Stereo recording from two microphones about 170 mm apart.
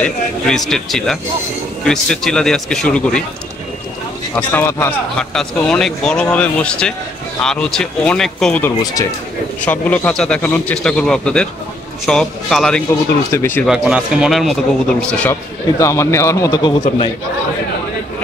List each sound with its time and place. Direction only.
0.0 s a man's voice: 5° left (ahead or behind)
4.4 s a man's voice: 10° left (ahead or behind)
13.3 s a man's voice: 15° left (ahead or behind)
13.7 s a man's voice: 5° right (ahead or behind)
15.8 s a man's voice: 15° left (ahead or behind)